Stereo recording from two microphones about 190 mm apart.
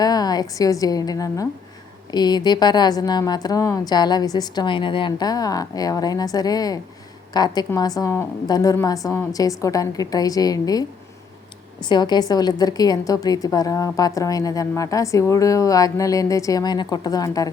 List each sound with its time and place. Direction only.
0.0 s a woman's voice: 20° left (ahead or behind)